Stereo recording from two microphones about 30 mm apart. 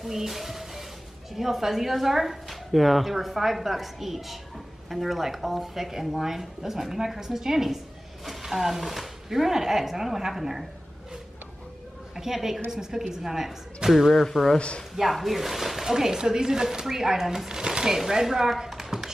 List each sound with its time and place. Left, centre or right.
0.0 s a woman's voice: centre
12.2 s a woman's voice: centre
18.7 s a sound: centre